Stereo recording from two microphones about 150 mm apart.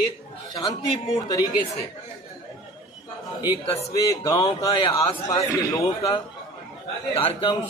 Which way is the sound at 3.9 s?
30° left (ahead or behind).